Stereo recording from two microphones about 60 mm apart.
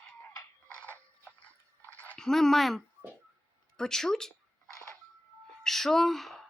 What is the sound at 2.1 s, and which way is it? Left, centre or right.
Speech, centre.